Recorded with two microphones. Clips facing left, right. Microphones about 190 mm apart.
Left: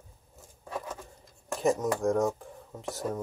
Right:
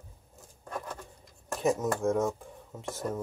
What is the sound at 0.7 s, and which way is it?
Speech, 5° left (ahead or behind).